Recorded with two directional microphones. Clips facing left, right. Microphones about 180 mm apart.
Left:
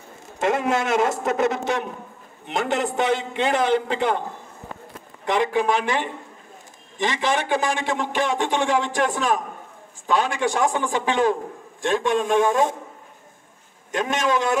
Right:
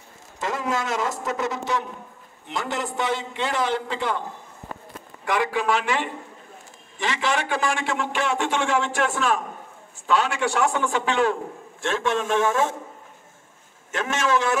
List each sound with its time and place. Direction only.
0.4 s a man's voice: 60° left (ahead or behind)
5.2 s a man's voice: 20° left (ahead or behind)
7.0 s a man's voice: 20° left (ahead or behind)
13.9 s a man's voice: 15° left (ahead or behind)